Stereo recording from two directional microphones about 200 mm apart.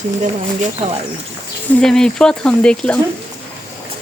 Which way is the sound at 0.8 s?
30° right (ahead or behind).